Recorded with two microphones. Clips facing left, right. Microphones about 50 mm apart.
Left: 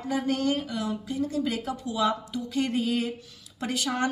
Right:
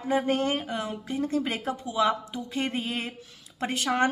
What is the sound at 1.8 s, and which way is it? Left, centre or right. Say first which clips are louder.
Speech: right 2 dB; right.